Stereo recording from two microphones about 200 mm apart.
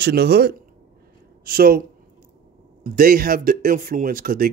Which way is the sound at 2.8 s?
45° right (ahead or behind).